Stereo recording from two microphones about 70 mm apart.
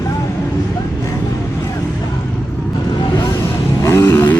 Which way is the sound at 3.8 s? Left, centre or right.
Left.